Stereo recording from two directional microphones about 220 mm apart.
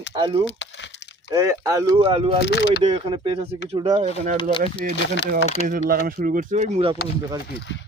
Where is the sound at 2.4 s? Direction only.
50° left (ahead or behind).